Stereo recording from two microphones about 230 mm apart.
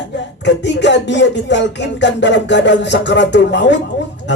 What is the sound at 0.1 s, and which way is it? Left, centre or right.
A man's voice, left.